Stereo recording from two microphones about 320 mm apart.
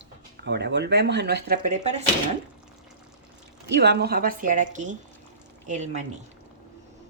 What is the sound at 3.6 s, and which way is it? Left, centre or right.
Speech, right.